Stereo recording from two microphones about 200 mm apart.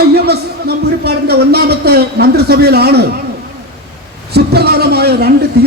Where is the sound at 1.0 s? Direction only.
55° right (ahead or behind).